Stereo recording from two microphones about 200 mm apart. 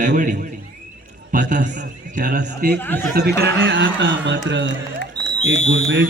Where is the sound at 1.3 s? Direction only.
40° right (ahead or behind).